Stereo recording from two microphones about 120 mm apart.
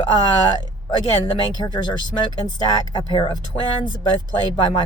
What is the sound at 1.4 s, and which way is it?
Speech, 40° left (ahead or behind).